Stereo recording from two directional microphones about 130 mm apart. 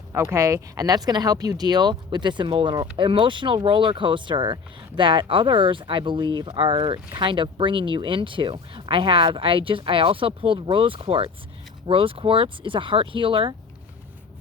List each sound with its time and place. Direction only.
0.1 s speech: 20° right (ahead or behind); by 13.6 s 40° right (ahead or behind)